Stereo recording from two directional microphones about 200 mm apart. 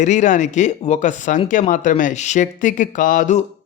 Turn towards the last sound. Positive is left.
turn(degrees=40)  # may be behind; listen again after turning